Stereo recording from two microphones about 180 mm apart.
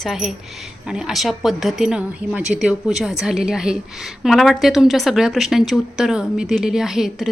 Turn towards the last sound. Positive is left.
turn(degrees=0)  # may be behind; listen again after turning